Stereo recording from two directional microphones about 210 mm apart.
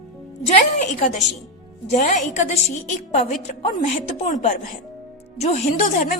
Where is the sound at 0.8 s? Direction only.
35° left (ahead or behind).